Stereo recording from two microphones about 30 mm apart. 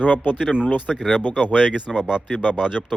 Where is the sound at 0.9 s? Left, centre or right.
Centre.